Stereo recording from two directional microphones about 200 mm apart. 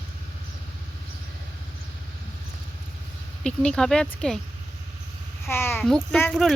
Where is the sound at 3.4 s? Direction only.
5° left (ahead or behind).